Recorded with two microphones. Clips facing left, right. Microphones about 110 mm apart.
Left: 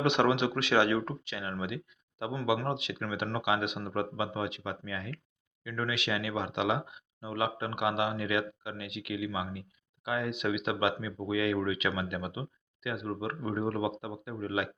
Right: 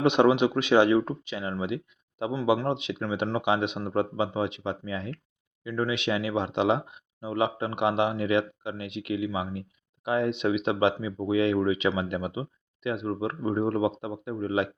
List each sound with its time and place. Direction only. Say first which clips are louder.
0.0 s speech: right 6 dB; 20° right (ahead or behind)
2.3 s speech: right 5 dB; 15° right (ahead or behind)